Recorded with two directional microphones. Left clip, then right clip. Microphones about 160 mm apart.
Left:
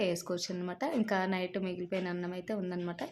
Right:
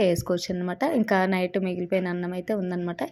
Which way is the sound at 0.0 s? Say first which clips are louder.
Right 10 dB; 30° right (ahead or behind).